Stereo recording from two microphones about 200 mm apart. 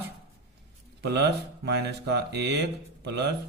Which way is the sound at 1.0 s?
55° right (ahead or behind).